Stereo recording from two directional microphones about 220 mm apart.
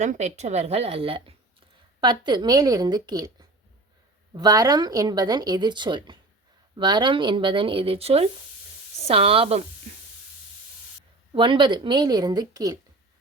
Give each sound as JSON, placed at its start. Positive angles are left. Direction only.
{"t": 0.0, "sound": "speech", "side_deg": -30}
{"t": 4.4, "sound": "speech", "side_deg": -15}
{"t": 11.3, "sound": "speech", "side_deg": -20}